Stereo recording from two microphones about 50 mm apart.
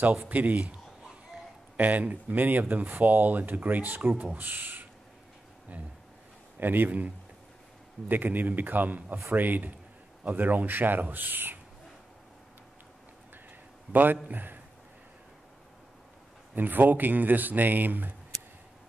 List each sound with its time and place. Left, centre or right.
0.3 s speech: right
1.8 s speech: right
6.6 s speech: right
8.1 s speech: right
14.3 s speech: right
16.5 s speech: right